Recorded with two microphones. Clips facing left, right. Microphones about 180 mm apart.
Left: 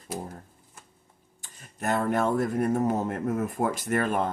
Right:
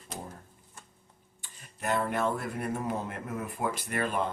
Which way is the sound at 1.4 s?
45° left (ahead or behind).